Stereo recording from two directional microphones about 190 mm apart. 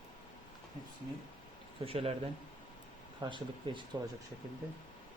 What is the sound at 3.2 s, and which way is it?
Speech, 25° right (ahead or behind).